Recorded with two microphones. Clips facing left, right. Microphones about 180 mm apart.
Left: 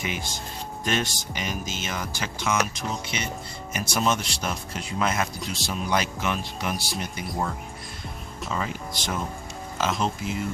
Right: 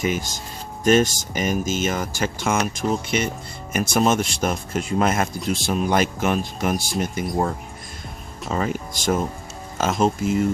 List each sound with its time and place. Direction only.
0.0 s speech: 45° right (ahead or behind)